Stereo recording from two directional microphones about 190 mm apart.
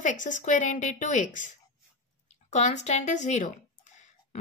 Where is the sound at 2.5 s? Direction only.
35° left (ahead or behind).